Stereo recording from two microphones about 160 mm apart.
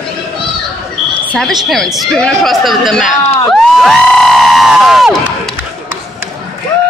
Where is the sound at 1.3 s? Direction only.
5° left (ahead or behind).